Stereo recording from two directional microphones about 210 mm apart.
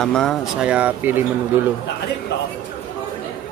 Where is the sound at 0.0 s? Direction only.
Centre (ahead or behind).